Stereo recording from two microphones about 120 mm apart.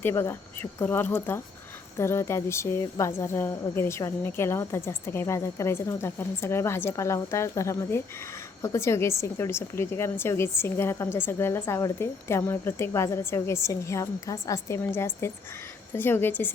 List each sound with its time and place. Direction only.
0.0 s a woman's voice: 20° left (ahead or behind)